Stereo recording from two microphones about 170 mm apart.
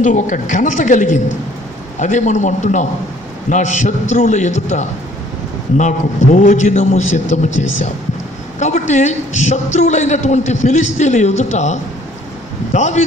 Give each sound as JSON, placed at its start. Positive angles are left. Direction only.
{"t": 0.0, "sound": "a woman's voice", "side_deg": 45}